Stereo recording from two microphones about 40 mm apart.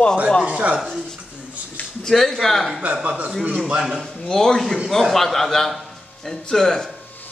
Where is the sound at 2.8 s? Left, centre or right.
Right.